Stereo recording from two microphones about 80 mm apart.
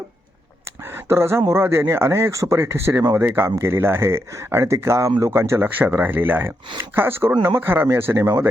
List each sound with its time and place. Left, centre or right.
0.9 s speech: right